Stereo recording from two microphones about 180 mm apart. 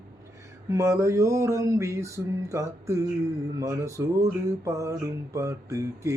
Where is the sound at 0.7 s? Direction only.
15° right (ahead or behind).